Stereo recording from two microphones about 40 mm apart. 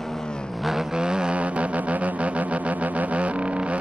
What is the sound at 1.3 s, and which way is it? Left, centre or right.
Music, right.